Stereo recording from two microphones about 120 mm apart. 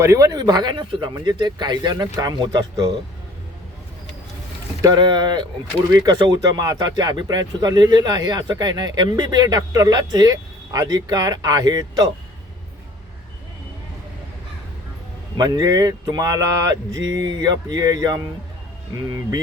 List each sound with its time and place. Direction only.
0.0 s speech: 25° right (ahead or behind); by 2.9 s 40° right (ahead or behind)
4.8 s speech: 35° right (ahead or behind)
15.4 s speech: 30° right (ahead or behind)